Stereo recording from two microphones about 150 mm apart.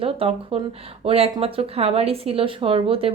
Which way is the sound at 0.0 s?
40° right (ahead or behind).